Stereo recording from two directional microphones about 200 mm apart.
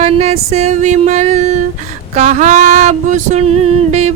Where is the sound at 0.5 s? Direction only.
35° right (ahead or behind).